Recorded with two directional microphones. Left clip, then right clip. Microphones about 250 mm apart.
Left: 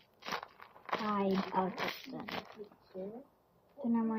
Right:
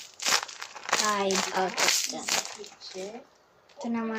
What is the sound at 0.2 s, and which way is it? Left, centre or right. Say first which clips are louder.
Crumpling: right 14 dB; centre.